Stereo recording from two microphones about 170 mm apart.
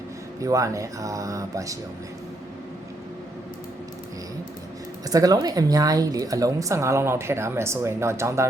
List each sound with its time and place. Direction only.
0.3 s speech: 20° right (ahead or behind)
5.0 s a woman's voice: 20° right (ahead or behind)